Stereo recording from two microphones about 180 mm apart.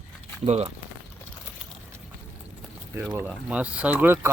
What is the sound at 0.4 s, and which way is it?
Speech, 35° right (ahead or behind).